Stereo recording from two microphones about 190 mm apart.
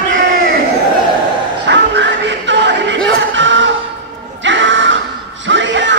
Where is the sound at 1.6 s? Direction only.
70° right (ahead or behind).